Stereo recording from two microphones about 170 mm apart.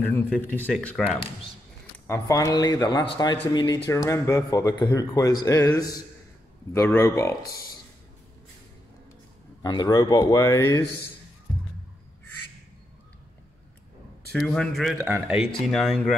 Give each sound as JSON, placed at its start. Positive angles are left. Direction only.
{"t": 0.1, "sound": "speech", "side_deg": 10}
{"t": 2.0, "sound": "a man's voice", "side_deg": 20}
{"t": 9.6, "sound": "a man's voice", "side_deg": 20}
{"t": 14.3, "sound": "speech", "side_deg": 5}
{"t": 15.0, "sound": "speech", "side_deg": -10}